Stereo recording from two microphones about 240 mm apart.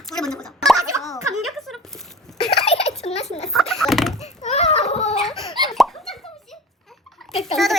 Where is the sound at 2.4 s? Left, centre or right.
Left.